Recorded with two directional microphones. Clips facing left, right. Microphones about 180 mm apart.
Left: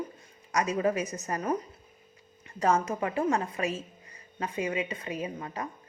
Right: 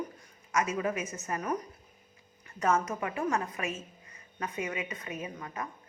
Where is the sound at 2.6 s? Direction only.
30° left (ahead or behind).